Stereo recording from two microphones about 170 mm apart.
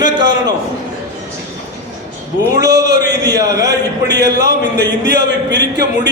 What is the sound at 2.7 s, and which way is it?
Speech, 75° right (ahead or behind).